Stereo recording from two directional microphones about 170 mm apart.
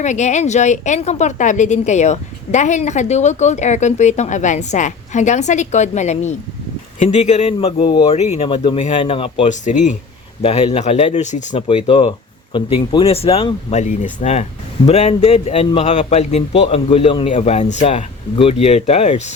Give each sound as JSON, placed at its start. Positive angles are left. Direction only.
{"t": 0.0, "sound": "a woman's voice", "side_deg": 45}
{"t": 9.6, "sound": "a woman's voice", "side_deg": 45}
{"t": 11.5, "sound": "a man's voice", "side_deg": 30}